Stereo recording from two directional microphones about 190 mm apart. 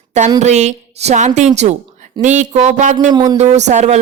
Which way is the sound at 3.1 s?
25° right (ahead or behind).